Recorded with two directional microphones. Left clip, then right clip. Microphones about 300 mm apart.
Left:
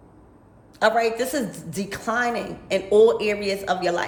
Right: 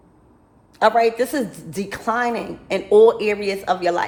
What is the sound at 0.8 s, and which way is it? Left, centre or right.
A woman's voice, centre.